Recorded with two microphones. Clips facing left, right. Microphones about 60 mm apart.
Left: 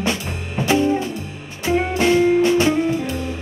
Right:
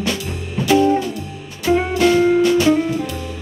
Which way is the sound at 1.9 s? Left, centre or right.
Left.